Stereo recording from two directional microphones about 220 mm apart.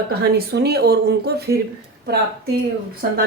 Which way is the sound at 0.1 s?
45° right (ahead or behind).